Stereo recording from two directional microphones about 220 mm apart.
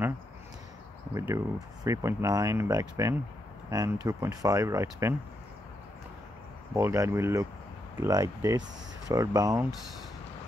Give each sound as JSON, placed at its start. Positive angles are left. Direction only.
{"t": 1.1, "sound": "speech", "side_deg": -15}
{"t": 6.7, "sound": "speech", "side_deg": -10}